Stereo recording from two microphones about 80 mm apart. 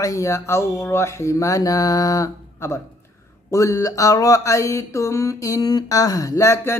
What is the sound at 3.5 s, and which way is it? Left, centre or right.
Mantra, left.